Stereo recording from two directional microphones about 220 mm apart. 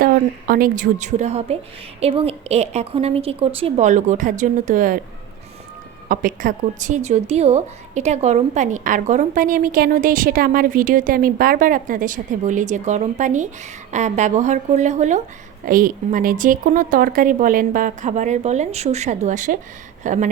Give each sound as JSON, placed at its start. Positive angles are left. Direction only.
{"t": 0.0, "sound": "a woman's voice", "side_deg": -40}
{"t": 6.1, "sound": "speech", "side_deg": -40}